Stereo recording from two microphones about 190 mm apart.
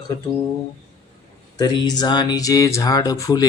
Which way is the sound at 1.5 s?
20° left (ahead or behind).